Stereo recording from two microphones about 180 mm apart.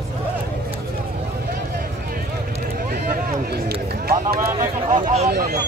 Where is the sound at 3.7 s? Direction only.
60° right (ahead or behind).